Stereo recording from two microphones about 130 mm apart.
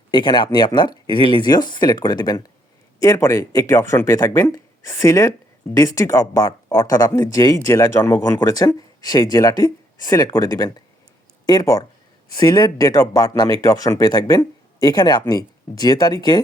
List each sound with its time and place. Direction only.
0.1 s speech: 35° left (ahead or behind)